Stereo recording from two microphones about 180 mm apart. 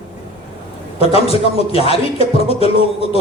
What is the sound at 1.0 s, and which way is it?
Speech, 35° left (ahead or behind).